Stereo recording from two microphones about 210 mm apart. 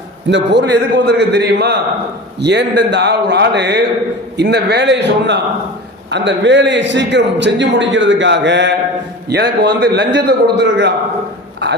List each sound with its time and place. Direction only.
0.3 s a man's voice: 55° right (ahead or behind)